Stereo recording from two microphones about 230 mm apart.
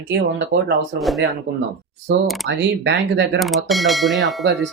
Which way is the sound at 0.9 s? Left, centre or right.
Centre.